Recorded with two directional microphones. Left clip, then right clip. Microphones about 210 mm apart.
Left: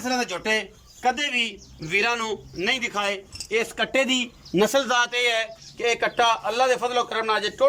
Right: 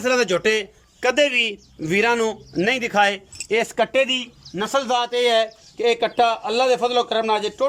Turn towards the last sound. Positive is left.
turn(degrees=-15)  # may be behind; listen again after turning